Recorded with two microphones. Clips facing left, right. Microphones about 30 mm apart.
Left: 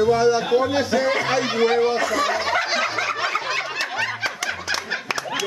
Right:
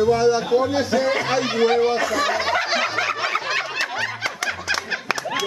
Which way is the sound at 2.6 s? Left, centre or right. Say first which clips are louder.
Right 1 dB; centre.